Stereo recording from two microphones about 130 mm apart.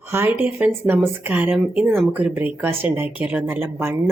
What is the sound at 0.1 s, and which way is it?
A woman's voice, 15° right (ahead or behind).